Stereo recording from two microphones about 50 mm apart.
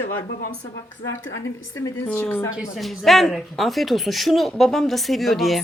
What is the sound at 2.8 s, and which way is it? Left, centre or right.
Speech, centre.